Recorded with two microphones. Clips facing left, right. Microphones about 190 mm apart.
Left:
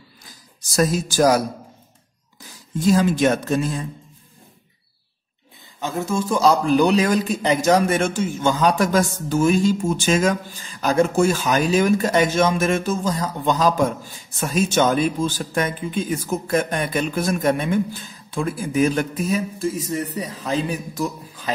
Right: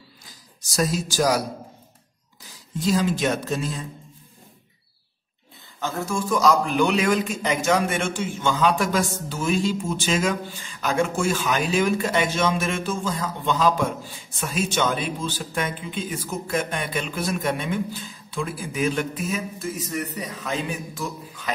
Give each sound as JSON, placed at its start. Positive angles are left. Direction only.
{"t": 0.7, "sound": "speech", "side_deg": 50}
{"t": 2.8, "sound": "speech", "side_deg": 50}
{"t": 5.8, "sound": "a man's voice", "side_deg": 20}